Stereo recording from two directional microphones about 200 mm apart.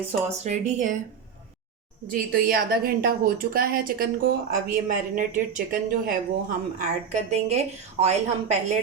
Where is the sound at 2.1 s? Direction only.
45° right (ahead or behind).